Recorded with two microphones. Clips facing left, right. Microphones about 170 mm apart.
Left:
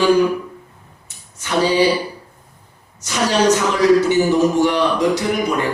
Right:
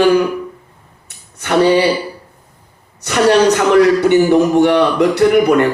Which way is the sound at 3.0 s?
60° right (ahead or behind).